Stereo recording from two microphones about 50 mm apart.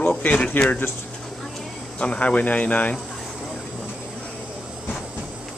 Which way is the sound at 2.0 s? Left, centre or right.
Left.